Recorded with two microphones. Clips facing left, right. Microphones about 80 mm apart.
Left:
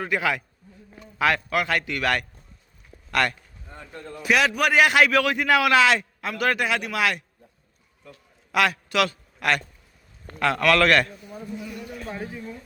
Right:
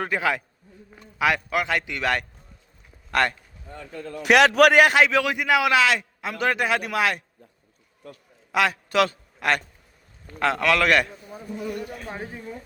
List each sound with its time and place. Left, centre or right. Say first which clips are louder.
0.1 s speech: left 2 dB; right
1.2 s a man's voice: even; centre
3.7 s a man's voice: right 4 dB; right
4.9 s a man's voice: even; centre
5.7 s a man's voice: left 3 dB; centre
6.2 s a man's voice: left 1 dB; centre
6.6 s speech: right 1 dB; right
8.5 s a man's voice: right 1 dB; right
10.4 s a man's voice: left 1 dB; right
11.5 s speech: right 7 dB; right
12.0 s a man's voice: left 1 dB; right